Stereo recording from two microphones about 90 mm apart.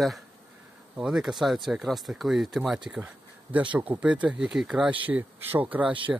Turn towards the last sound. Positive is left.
turn(degrees=-15)  # may be behind; listen again after turning